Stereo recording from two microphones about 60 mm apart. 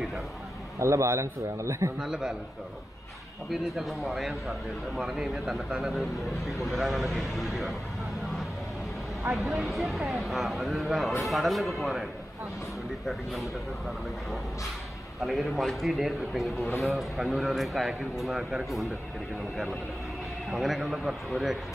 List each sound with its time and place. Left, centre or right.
0.7 s a man's voice: right
2.0 s speech: centre
3.6 s speech: centre
9.3 s speech: centre
15.1 s speech: centre
20.5 s speech: centre